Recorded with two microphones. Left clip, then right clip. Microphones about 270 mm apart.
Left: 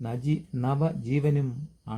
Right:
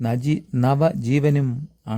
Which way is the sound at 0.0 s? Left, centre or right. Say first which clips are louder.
Right 8 dB; right.